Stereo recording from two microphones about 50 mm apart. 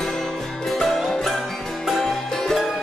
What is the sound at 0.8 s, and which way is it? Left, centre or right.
Music, centre.